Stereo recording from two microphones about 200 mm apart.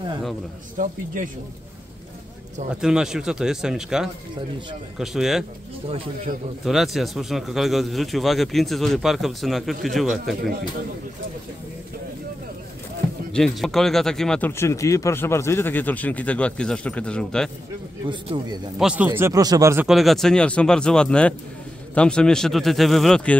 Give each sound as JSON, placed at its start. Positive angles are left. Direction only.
{"t": 0.7, "sound": "speech", "side_deg": -40}
{"t": 2.7, "sound": "speech", "side_deg": -5}
{"t": 6.6, "sound": "speech", "side_deg": 0}
{"t": 13.3, "sound": "speech", "side_deg": 0}
{"t": 18.0, "sound": "a man's voice", "side_deg": -25}
{"t": 18.8, "sound": "speech", "side_deg": -5}
{"t": 19.9, "sound": "speech", "side_deg": 0}